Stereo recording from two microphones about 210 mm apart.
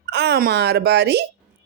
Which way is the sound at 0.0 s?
50° right (ahead or behind).